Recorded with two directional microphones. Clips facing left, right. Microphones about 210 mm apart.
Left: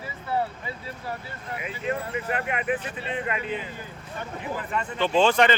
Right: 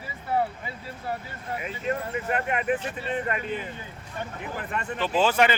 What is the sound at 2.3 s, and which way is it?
Speech, 40° right (ahead or behind).